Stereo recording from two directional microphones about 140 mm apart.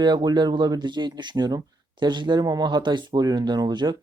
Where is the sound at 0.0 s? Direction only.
30° right (ahead or behind).